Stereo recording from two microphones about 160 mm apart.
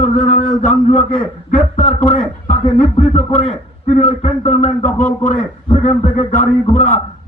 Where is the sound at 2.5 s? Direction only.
50° left (ahead or behind).